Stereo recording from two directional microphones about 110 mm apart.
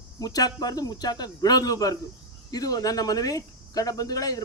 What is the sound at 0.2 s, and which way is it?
Speech, 35° left (ahead or behind).